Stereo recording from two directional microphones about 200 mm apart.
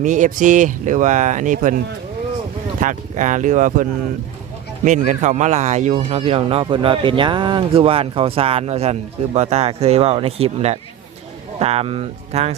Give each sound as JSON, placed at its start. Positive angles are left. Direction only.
{"t": 0.0, "sound": "speech", "side_deg": -40}
{"t": 2.8, "sound": "speech", "side_deg": -40}
{"t": 4.9, "sound": "speech", "side_deg": -35}